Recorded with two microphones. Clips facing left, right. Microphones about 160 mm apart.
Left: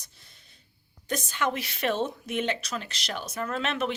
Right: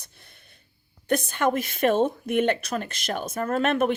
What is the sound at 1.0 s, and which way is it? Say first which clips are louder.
A woman's voice: right 6 dB; 60° right (ahead or behind).